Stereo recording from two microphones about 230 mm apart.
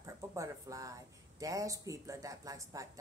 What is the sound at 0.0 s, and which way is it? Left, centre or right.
A woman's voice, centre.